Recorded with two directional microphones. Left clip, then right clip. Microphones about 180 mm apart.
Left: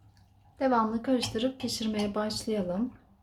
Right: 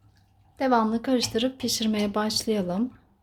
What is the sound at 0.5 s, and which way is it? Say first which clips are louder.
Speech: right 4 dB; 40° right (ahead or behind).